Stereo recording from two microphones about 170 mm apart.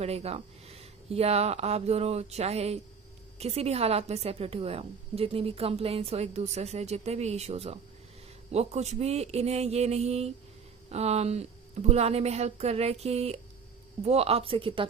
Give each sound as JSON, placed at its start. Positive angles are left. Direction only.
{"t": 0.0, "sound": "a woman's voice", "side_deg": -40}